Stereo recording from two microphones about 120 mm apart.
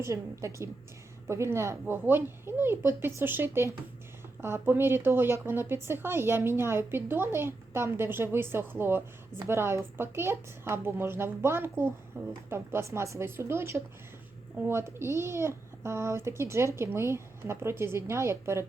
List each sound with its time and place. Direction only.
0.0 s a woman's voice: 25° right (ahead or behind)